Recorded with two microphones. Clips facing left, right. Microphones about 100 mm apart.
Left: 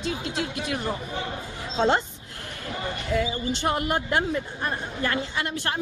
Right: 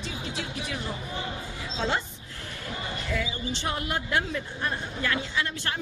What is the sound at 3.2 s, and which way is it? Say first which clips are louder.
Speech: left 5 dB; 50° left (ahead or behind).